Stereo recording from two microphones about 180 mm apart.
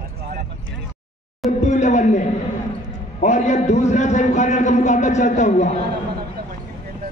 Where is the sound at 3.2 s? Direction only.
40° left (ahead or behind).